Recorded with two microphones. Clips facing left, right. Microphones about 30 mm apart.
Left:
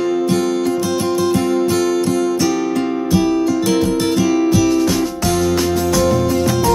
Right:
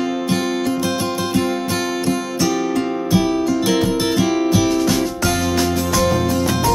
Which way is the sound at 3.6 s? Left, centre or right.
Centre.